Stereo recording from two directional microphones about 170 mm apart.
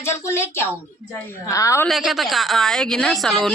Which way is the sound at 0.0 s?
15° left (ahead or behind).